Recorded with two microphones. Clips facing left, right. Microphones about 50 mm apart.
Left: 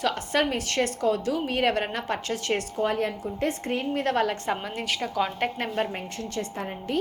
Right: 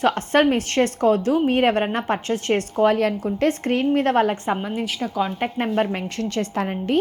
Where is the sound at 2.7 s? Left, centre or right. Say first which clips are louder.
Right 11 dB; right.